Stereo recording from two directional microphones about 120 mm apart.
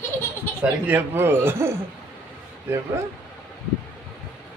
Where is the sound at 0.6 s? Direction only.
15° right (ahead or behind).